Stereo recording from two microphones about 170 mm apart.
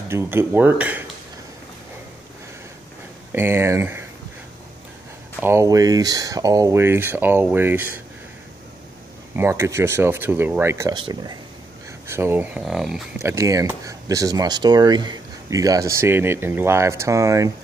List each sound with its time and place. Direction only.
0.1 s speech: 15° right (ahead or behind)
3.3 s speech: 15° right (ahead or behind)
5.4 s speech: 15° right (ahead or behind)
9.3 s speech: 15° right (ahead or behind)
11.0 s speech: 25° right (ahead or behind)
12.1 s speech: 15° right (ahead or behind)
13.2 s speech: 15° right (ahead or behind)